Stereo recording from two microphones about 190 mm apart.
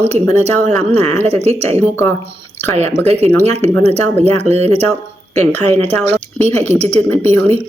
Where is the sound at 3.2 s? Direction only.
10° left (ahead or behind).